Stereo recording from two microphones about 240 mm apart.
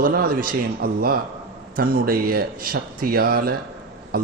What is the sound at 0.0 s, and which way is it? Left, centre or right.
A man's voice, right.